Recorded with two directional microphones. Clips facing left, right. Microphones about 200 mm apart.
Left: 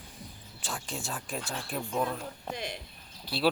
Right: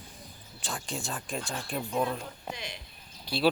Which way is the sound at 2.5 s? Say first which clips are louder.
Left 5 dB; 55° left (ahead or behind).